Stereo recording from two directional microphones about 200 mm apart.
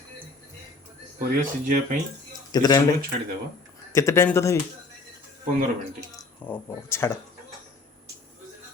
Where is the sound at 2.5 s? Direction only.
20° left (ahead or behind).